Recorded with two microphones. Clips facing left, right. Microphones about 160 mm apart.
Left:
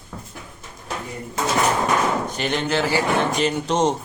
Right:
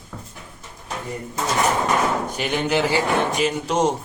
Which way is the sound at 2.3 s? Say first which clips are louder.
Even; 10° right (ahead or behind).